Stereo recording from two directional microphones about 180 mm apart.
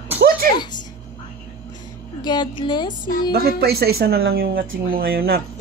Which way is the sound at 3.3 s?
60° right (ahead or behind).